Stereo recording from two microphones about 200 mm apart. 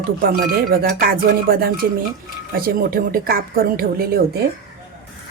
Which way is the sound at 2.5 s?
50° right (ahead or behind).